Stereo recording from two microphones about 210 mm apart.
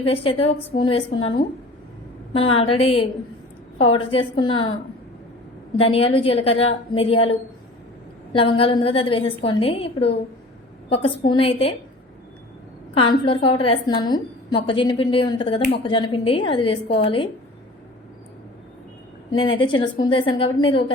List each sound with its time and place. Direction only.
0.0 s a woman's voice: 25° left (ahead or behind)
2.6 s a woman's voice: 30° left (ahead or behind)
5.8 s a woman's voice: 25° left (ahead or behind)
12.9 s a woman's voice: 25° left (ahead or behind)
19.4 s a woman's voice: 25° left (ahead or behind)